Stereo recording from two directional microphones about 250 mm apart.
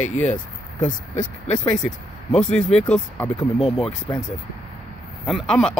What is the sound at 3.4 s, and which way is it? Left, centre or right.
Speech, left.